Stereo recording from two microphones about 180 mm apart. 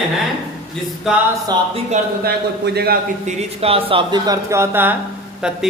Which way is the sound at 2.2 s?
60° right (ahead or behind).